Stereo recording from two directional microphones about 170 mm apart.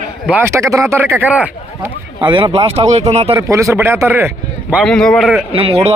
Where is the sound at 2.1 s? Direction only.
25° right (ahead or behind).